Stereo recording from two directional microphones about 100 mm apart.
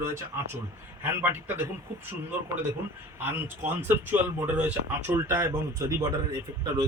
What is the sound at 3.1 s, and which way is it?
Speech, 20° right (ahead or behind).